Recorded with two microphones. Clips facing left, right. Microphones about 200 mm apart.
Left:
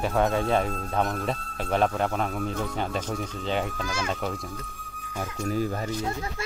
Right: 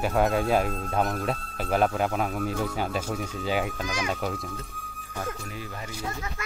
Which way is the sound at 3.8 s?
15° right (ahead or behind).